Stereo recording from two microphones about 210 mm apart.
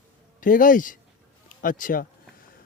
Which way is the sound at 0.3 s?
40° left (ahead or behind).